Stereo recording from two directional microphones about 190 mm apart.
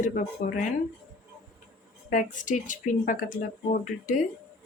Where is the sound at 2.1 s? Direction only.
45° left (ahead or behind).